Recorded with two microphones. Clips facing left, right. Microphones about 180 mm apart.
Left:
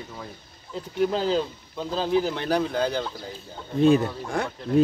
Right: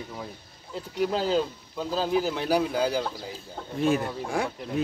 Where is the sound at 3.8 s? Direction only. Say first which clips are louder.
Left 6 dB; 20° left (ahead or behind).